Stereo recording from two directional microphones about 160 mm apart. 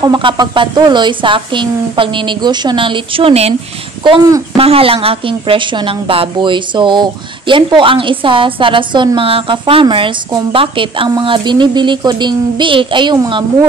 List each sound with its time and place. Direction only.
0.0 s a woman's voice: 30° right (ahead or behind)
4.6 s a woman's voice: 35° right (ahead or behind)